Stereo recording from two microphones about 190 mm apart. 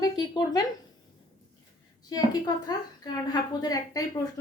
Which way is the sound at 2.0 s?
20° left (ahead or behind).